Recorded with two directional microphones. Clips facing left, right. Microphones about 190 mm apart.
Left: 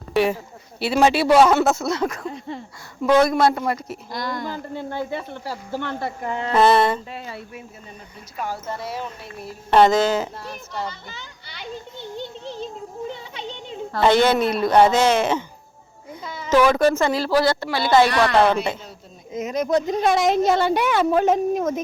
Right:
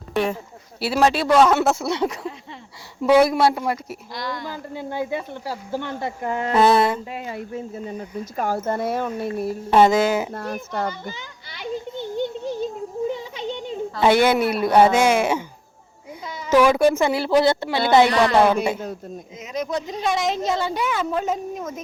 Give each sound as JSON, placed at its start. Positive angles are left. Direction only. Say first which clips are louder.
{"t": 0.1, "sound": "speech", "louder": "left 3 dB", "side_deg": 5}
{"t": 0.8, "sound": "speech", "louder": "left 1 dB", "side_deg": -5}
{"t": 1.6, "sound": "speech", "louder": "even", "side_deg": -10}
{"t": 4.1, "sound": "speech", "louder": "left 2 dB", "side_deg": 50}
{"t": 4.4, "sound": "speech", "louder": "left 1 dB", "side_deg": -10}
{"t": 6.5, "sound": "speech", "louder": "even", "side_deg": 0}
{"t": 8.4, "sound": "speech", "louder": "right 5 dB", "side_deg": -50}
{"t": 9.6, "sound": "speech", "louder": "even", "side_deg": -5}
{"t": 10.3, "sound": "speech", "louder": "right 5 dB", "side_deg": -50}
{"t": 12.1, "sound": "a sound", "louder": "right 7 dB", "side_deg": -50}
{"t": 14.0, "sound": "a woman's voice", "louder": "even", "side_deg": -10}
{"t": 19.4, "sound": "a woman's voice", "louder": "left 6 dB", "side_deg": 45}